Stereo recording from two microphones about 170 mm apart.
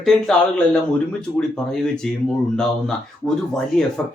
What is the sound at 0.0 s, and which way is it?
Speech, 5° left (ahead or behind).